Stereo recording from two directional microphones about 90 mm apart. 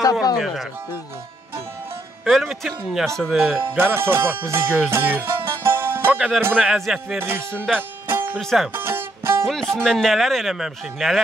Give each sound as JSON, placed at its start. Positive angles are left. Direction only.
{"t": 0.0, "sound": "speech", "side_deg": 45}
{"t": 2.2, "sound": "speech", "side_deg": 0}
{"t": 3.7, "sound": "speech", "side_deg": -25}
{"t": 4.9, "sound": "music", "side_deg": -25}
{"t": 6.1, "sound": "speech", "side_deg": 0}
{"t": 8.1, "sound": "music", "side_deg": -25}
{"t": 8.4, "sound": "speech", "side_deg": 5}
{"t": 8.7, "sound": "music", "side_deg": -25}
{"t": 9.5, "sound": "speech", "side_deg": 5}